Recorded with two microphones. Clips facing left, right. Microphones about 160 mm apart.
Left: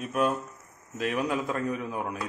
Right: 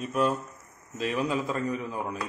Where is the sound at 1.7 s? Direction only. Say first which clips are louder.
Even; 10° left (ahead or behind).